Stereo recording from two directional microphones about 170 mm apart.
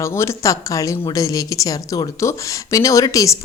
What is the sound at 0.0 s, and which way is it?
Speech, 15° left (ahead or behind).